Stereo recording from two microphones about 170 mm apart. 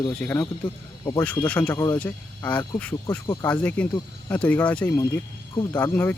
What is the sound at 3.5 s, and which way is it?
Speech, 10° left (ahead or behind).